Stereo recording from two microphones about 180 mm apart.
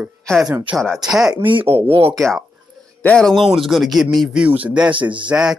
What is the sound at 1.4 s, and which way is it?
Speech, 30° right (ahead or behind).